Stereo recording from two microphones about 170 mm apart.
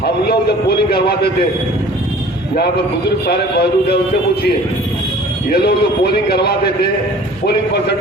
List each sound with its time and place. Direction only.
0.3 s a man's voice: 70° left (ahead or behind)
3.2 s a man's voice: 65° left (ahead or behind)
5.5 s a man's voice: 65° left (ahead or behind)